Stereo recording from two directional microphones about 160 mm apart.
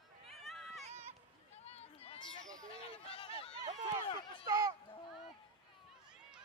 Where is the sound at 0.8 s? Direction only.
45° right (ahead or behind).